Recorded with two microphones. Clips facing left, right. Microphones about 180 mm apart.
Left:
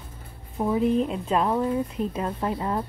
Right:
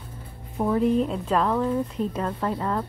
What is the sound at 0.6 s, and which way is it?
Speech, 10° left (ahead or behind).